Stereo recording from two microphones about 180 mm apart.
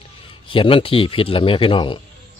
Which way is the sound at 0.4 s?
30° left (ahead or behind).